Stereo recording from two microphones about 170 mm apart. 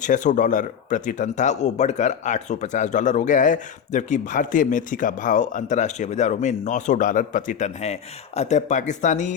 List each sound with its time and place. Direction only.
0.0 s speech: 50° left (ahead or behind)